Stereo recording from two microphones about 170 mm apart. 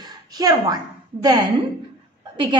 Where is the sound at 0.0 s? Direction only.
20° right (ahead or behind).